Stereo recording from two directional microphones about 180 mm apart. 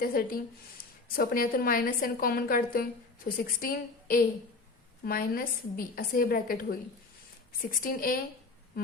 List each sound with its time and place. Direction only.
0.0 s a woman's voice: 55° left (ahead or behind)